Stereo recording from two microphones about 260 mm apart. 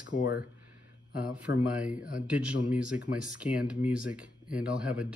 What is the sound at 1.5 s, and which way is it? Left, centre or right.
Speech, left.